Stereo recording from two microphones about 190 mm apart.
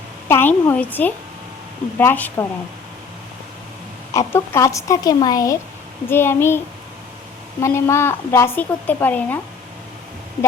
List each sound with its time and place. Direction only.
0.3 s a woman's voice: 10° left (ahead or behind)
4.1 s a woman's voice: 15° left (ahead or behind)
7.6 s a woman's voice: 15° left (ahead or behind)